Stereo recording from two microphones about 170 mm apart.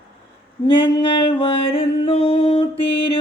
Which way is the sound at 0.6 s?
30° left (ahead or behind).